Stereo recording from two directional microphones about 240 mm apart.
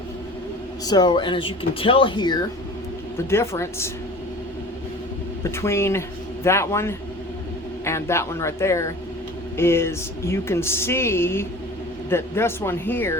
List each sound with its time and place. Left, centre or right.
0.9 s speech: centre
5.4 s a man's voice: centre